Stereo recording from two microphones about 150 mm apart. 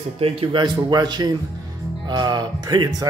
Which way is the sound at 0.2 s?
35° right (ahead or behind).